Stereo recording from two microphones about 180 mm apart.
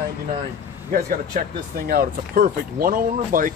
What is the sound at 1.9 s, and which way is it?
Speech, 55° right (ahead or behind).